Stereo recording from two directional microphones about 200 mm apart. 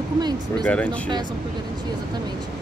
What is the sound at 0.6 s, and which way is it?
Speech, 5° left (ahead or behind).